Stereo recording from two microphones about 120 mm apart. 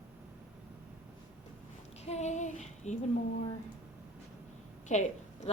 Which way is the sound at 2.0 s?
65° left (ahead or behind).